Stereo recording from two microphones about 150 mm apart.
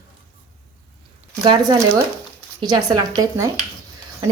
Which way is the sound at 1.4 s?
35° right (ahead or behind).